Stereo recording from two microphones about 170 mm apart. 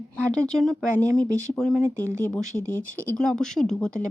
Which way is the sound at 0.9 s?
15° right (ahead or behind).